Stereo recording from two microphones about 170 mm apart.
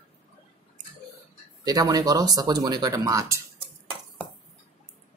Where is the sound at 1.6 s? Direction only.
20° right (ahead or behind).